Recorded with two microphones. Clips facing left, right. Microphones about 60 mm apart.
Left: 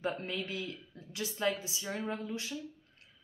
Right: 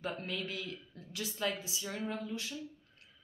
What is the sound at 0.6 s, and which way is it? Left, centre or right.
A woman's voice, left.